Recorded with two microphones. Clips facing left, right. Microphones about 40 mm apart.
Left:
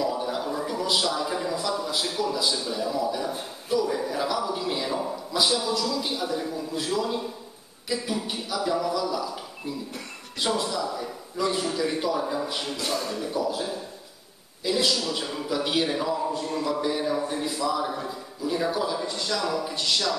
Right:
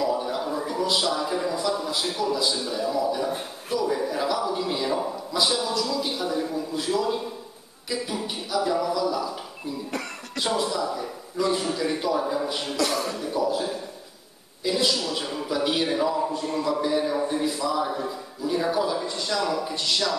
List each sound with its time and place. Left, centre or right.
0.0 s a man's voice: centre
10.4 s a man's voice: centre
12.7 s speech: right
13.1 s a man's voice: centre